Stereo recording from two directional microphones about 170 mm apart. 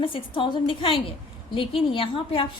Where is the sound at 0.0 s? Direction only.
30° left (ahead or behind).